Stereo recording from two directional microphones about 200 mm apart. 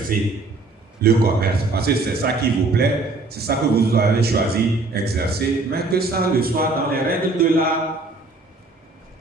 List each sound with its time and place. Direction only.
0.1 s a man's voice: 45° right (ahead or behind)